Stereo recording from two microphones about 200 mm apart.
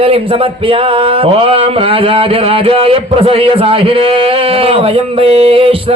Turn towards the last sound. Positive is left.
turn(degrees=-25)  # may be behind; listen again after turning